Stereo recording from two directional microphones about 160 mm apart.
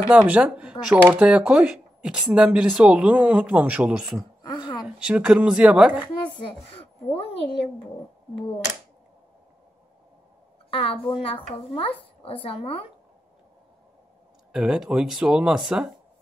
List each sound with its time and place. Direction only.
0.1 s speech: 10° right (ahead or behind)
4.4 s a sound: 25° left (ahead or behind)
4.8 s speech: 5° right (ahead or behind)
6.3 s speech: 35° left (ahead or behind)
10.7 s a woman's voice: 35° left (ahead or behind)
14.5 s speech: 5° right (ahead or behind)